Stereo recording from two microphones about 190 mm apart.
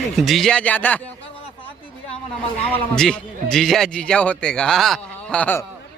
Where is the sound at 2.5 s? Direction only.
5° left (ahead or behind).